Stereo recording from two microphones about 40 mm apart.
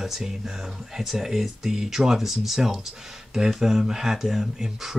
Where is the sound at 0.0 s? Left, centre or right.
Centre.